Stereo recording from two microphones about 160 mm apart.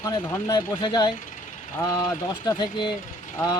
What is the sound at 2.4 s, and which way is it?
Speech, 25° left (ahead or behind).